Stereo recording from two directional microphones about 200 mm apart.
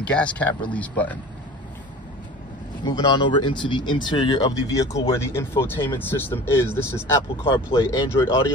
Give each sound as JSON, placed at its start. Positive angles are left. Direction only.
{"t": 0.0, "sound": "speech", "side_deg": 5}
{"t": 2.8, "sound": "speech", "side_deg": 20}